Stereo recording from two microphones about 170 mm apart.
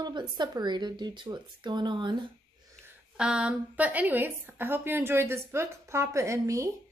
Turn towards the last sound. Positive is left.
turn(degrees=-15)  # may be behind; listen again after turning